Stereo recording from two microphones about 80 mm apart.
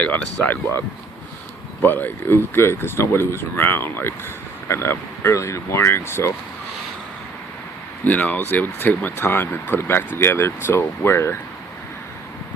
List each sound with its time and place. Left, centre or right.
0.0 s speech: centre
1.8 s speech: left
8.0 s speech: centre